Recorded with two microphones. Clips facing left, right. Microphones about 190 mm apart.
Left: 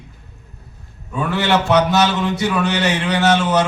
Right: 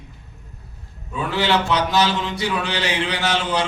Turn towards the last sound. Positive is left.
turn(degrees=55)  # may be behind; listen again after turning